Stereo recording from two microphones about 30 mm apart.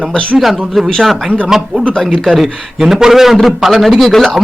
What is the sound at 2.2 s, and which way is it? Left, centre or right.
A man's voice, centre.